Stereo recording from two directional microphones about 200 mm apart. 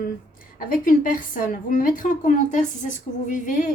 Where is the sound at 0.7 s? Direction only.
45° left (ahead or behind).